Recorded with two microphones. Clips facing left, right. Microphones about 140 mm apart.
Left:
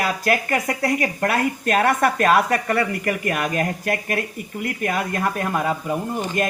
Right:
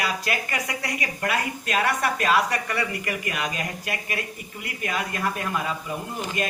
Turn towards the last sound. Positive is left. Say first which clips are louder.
# left 6 dB
turn(degrees=45)  # may be behind; listen again after turning